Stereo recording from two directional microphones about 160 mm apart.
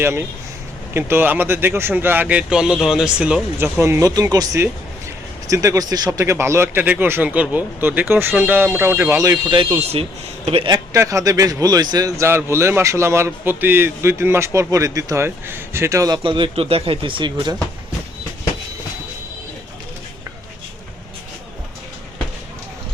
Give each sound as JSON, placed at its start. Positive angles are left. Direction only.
{"t": 0.0, "sound": "speech", "side_deg": -15}
{"t": 10.7, "sound": "a man's voice", "side_deg": -20}